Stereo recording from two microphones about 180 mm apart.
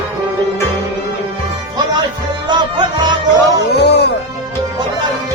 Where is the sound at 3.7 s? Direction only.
70° left (ahead or behind).